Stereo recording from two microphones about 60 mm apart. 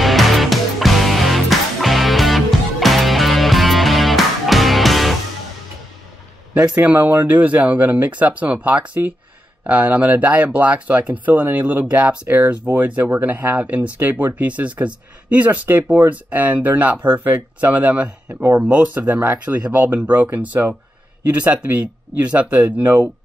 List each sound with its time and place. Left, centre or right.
0.0 s music: centre
6.7 s speech: right